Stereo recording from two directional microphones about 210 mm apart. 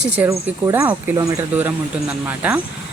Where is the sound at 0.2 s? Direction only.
15° right (ahead or behind).